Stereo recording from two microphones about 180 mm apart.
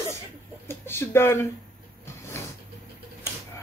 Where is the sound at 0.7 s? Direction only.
15° left (ahead or behind).